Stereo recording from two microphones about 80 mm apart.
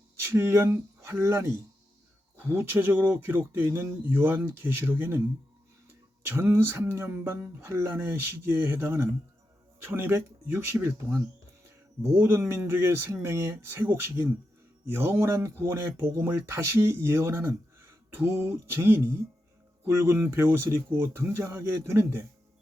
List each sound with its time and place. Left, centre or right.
0.2 s speech: right
6.2 s speech: right